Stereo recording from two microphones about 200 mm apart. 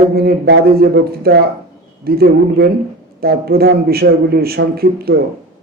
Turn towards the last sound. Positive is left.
turn(degrees=-50)  # may be behind; listen again after turning